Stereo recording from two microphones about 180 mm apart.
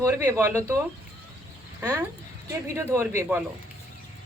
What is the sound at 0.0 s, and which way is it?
Speech, 15° right (ahead or behind).